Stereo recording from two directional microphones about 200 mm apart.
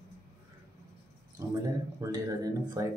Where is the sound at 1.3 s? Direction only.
15° right (ahead or behind).